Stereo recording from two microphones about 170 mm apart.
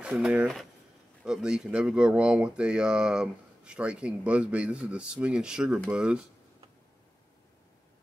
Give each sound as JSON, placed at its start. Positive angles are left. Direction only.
{"t": 0.0, "sound": "speech", "side_deg": -10}